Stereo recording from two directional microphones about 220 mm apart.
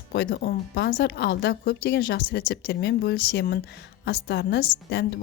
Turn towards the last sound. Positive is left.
turn(degrees=45)  # may be behind; listen again after turning